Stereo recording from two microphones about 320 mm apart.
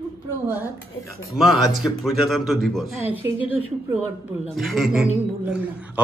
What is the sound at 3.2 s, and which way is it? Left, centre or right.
Speech, centre.